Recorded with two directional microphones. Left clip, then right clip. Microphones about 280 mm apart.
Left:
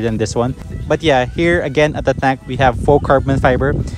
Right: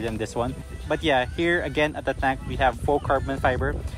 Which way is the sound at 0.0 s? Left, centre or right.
Left.